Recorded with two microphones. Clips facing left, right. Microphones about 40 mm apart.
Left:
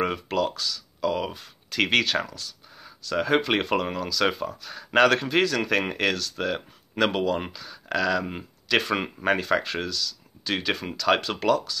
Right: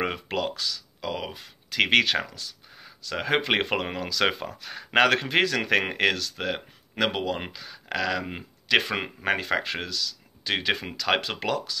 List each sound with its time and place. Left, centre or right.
0.0 s speech: centre
1.8 s speech: centre